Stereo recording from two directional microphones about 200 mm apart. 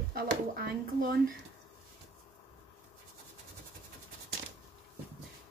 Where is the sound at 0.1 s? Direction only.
45° right (ahead or behind).